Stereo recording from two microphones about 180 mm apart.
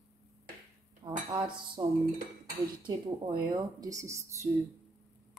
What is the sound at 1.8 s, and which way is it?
Speech, 20° right (ahead or behind).